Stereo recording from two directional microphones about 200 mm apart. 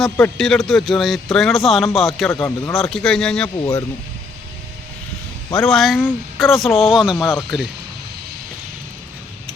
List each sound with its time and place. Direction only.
0.0 s speech: centre (ahead or behind)
2.3 s speech: 10° left (ahead or behind)
2.7 s speech: centre (ahead or behind)
3.6 s speech: 20° left (ahead or behind)
5.5 s speech: centre (ahead or behind)